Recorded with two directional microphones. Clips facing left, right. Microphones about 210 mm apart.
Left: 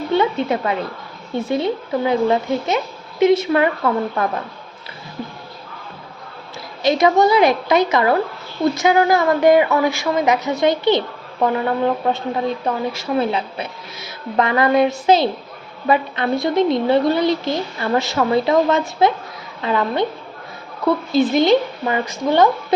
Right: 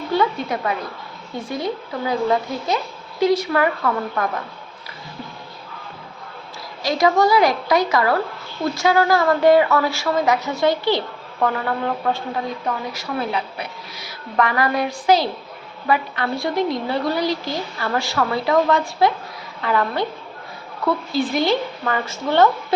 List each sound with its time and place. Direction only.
0.1 s a woman's voice: 25° left (ahead or behind)
6.8 s a woman's voice: 20° left (ahead or behind)